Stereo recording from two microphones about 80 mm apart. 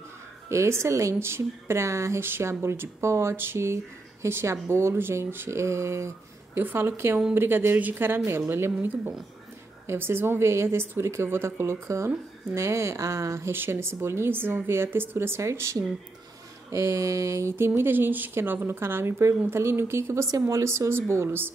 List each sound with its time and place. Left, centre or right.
0.5 s speech: right